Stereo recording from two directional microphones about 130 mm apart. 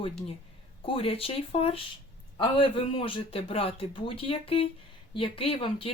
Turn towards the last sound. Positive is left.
turn(degrees=45)  # may be behind; listen again after turning